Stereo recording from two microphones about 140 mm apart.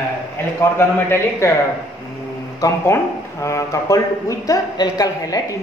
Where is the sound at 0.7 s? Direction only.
20° left (ahead or behind).